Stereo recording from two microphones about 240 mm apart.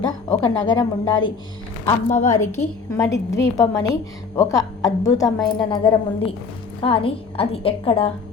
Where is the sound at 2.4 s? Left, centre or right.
Centre.